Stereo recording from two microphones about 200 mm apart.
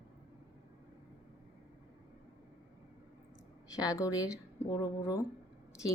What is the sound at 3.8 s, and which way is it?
Speech, 15° left (ahead or behind).